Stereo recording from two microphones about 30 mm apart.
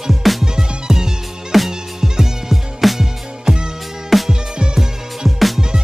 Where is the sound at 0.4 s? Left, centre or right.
Centre.